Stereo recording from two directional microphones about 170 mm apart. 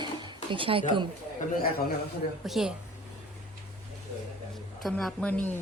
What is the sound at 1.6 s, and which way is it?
Speech, 60° left (ahead or behind).